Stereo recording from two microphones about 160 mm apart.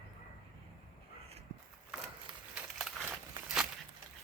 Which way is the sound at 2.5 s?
5° right (ahead or behind).